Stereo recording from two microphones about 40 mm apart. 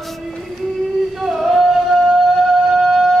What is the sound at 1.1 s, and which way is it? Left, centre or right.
Male singing, centre.